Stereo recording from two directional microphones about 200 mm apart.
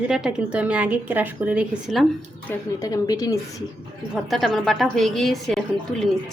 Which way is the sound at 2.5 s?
20° left (ahead or behind).